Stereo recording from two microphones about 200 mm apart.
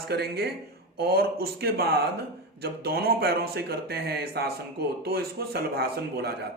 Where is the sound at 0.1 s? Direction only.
55° right (ahead or behind).